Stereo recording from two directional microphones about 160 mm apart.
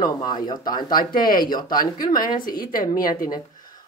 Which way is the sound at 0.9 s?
60° left (ahead or behind).